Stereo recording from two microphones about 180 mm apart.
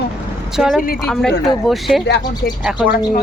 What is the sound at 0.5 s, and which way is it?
Speech, 5° right (ahead or behind).